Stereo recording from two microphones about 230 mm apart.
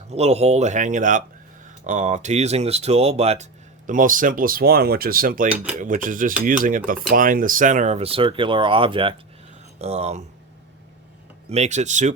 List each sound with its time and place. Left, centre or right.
0.1 s speech: right
5.5 s speech: centre
5.8 s speech: right
11.4 s speech: right